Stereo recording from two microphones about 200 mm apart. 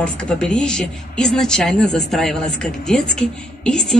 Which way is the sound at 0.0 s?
5° left (ahead or behind).